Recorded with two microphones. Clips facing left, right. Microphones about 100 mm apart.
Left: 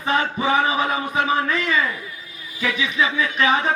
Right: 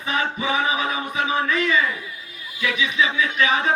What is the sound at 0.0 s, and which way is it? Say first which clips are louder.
A man's voice: left 3 dB; 40° left (ahead or behind).